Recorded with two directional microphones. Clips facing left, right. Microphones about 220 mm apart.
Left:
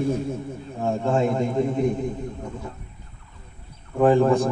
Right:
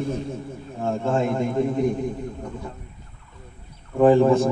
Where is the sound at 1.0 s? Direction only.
Centre (ahead or behind).